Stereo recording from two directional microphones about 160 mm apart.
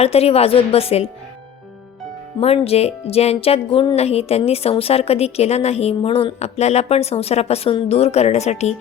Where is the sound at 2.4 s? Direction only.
40° left (ahead or behind).